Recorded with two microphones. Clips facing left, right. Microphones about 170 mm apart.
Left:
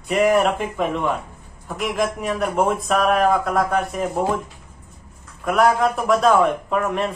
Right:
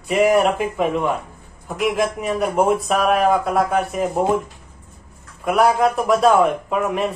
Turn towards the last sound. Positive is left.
turn(degrees=-5)  # may be behind; listen again after turning